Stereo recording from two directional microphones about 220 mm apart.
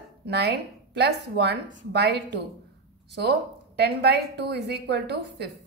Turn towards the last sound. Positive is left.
turn(degrees=-50)  # may be behind; listen again after turning